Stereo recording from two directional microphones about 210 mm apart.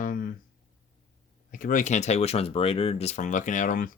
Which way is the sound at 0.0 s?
40° left (ahead or behind).